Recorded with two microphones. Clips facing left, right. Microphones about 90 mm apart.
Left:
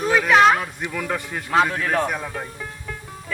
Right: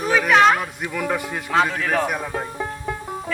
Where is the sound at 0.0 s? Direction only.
Centre (ahead or behind).